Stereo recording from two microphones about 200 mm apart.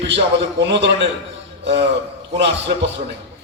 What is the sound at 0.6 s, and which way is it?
Speech, 60° right (ahead or behind).